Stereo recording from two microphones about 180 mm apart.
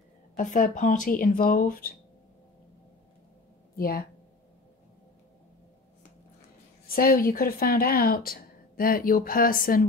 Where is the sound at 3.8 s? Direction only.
55° left (ahead or behind).